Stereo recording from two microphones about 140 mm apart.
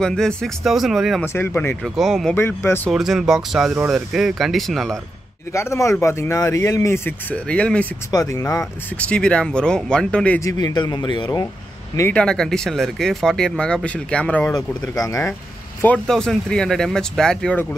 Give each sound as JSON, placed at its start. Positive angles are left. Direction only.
{"t": 0.0, "sound": "speech", "side_deg": 5}
{"t": 1.2, "sound": "speech", "side_deg": 20}
{"t": 2.0, "sound": "speech", "side_deg": 0}
{"t": 2.3, "sound": "speech", "side_deg": 15}
{"t": 2.9, "sound": "speech", "side_deg": -5}
{"t": 5.5, "sound": "speech", "side_deg": 20}
{"t": 8.1, "sound": "speech", "side_deg": 25}
{"t": 9.0, "sound": "speech", "side_deg": 5}
{"t": 10.4, "sound": "a man's voice", "side_deg": 30}
{"t": 12.1, "sound": "speech", "side_deg": 5}
{"t": 14.5, "sound": "speech", "side_deg": 25}
{"t": 15.8, "sound": "speech", "side_deg": 10}